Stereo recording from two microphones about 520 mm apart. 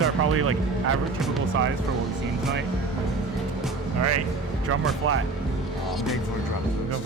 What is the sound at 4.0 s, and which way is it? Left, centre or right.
Speech, right.